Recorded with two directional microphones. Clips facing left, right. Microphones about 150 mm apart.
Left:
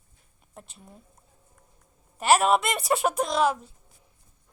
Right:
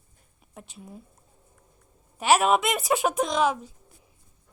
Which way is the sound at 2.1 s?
Centre (ahead or behind).